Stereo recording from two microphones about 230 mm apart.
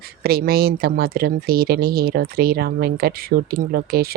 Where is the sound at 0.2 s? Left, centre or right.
Right.